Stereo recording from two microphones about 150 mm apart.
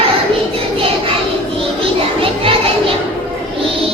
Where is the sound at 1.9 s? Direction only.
40° right (ahead or behind).